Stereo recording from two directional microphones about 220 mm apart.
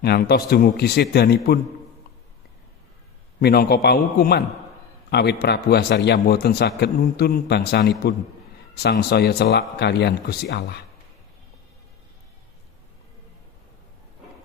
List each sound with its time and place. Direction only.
0.0 s a man's voice: 45° left (ahead or behind)
3.4 s a man's voice: 45° left (ahead or behind)